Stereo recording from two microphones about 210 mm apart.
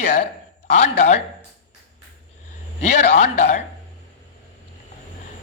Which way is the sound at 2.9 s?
30° left (ahead or behind).